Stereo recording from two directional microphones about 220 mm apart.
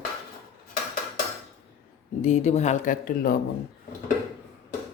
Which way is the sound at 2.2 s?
30° left (ahead or behind).